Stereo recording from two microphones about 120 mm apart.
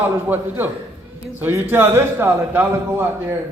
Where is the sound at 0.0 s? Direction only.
15° right (ahead or behind).